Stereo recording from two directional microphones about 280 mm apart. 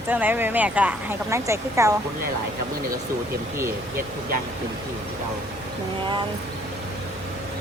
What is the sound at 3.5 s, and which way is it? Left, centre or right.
Speech, centre.